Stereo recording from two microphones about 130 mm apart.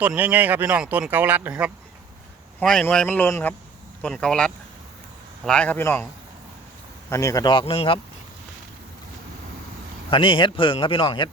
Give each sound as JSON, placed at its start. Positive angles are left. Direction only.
{"t": 0.0, "sound": "speech", "side_deg": -10}
{"t": 2.6, "sound": "speech", "side_deg": 5}
{"t": 4.0, "sound": "speech", "side_deg": 5}
{"t": 7.1, "sound": "a man's voice", "side_deg": 25}
{"t": 7.4, "sound": "speech", "side_deg": 40}
{"t": 10.1, "sound": "speech", "side_deg": 40}